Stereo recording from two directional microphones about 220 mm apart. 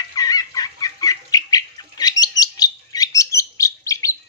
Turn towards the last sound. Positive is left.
turn(degrees=15)  # may be behind; listen again after turning